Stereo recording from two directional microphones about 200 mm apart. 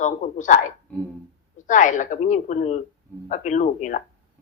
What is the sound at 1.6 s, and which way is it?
Speech, 40° left (ahead or behind).